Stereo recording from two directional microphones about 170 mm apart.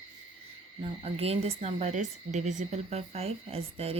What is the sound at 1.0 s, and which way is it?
Speech, 35° right (ahead or behind).